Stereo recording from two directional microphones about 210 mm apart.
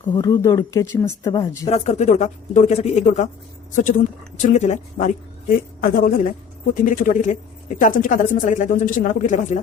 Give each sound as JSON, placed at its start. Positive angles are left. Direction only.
{"t": 0.0, "sound": "speech", "side_deg": 20}
{"t": 1.6, "sound": "speech", "side_deg": 30}